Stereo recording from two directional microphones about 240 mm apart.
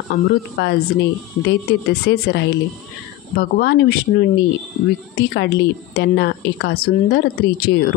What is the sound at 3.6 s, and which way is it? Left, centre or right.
A woman's voice, left.